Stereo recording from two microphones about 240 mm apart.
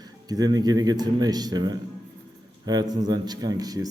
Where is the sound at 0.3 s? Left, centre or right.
Centre.